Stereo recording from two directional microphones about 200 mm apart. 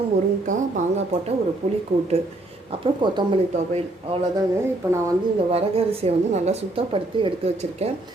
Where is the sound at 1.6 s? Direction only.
30° right (ahead or behind).